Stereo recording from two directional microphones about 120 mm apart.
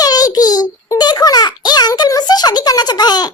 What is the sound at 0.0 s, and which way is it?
Child singing, 30° left (ahead or behind).